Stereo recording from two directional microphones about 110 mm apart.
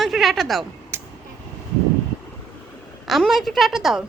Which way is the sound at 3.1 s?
Centre (ahead or behind).